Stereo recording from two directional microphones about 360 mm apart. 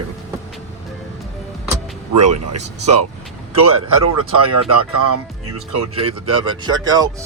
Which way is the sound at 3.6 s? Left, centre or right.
Right.